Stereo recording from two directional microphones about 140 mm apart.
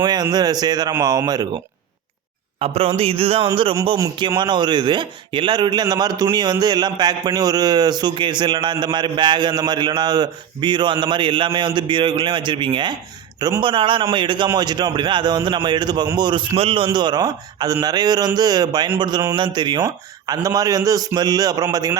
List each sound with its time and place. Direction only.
0.0 s a man's voice: 30° right (ahead or behind)
2.6 s a man's voice: 45° right (ahead or behind); by 21.9 s 25° right (ahead or behind)